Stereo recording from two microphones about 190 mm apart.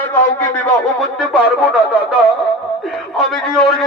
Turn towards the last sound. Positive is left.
turn(degrees=0)  # may be behind; listen again after turning